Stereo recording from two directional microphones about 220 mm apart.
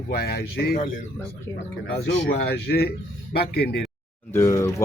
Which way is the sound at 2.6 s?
45° left (ahead or behind).